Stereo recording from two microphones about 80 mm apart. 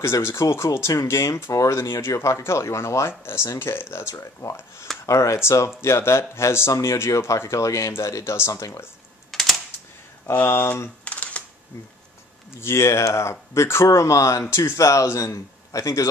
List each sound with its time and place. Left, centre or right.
0.0 s speech: left
9.3 s typing: centre
10.3 s speech: left
11.1 s camera: centre
12.5 s speech: left